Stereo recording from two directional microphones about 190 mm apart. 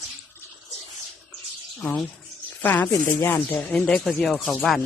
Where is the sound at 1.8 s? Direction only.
5° left (ahead or behind).